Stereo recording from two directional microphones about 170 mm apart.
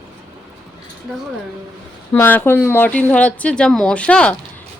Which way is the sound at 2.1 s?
10° left (ahead or behind).